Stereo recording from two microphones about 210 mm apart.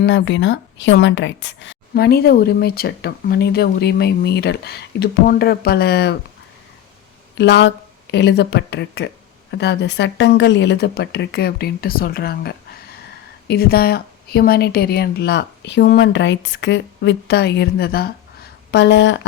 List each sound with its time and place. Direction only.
0.0 s speech: 60° left (ahead or behind)
7.3 s speech: 55° left (ahead or behind)